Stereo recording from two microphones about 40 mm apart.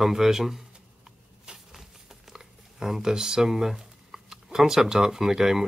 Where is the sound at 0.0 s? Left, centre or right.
Centre.